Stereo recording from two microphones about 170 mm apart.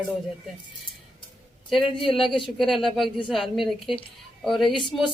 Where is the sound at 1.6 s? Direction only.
Centre (ahead or behind).